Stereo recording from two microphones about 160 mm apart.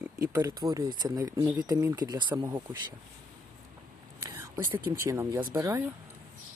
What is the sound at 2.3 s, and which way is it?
Speech, 15° right (ahead or behind).